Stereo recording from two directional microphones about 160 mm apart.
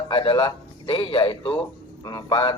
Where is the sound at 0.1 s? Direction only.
30° left (ahead or behind).